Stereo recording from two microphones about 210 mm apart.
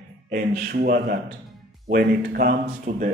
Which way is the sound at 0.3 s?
45° right (ahead or behind).